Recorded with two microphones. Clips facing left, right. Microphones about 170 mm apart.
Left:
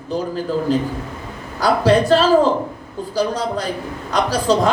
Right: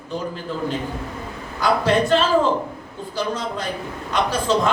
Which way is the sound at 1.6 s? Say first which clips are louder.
Left 4 dB; 35° left (ahead or behind).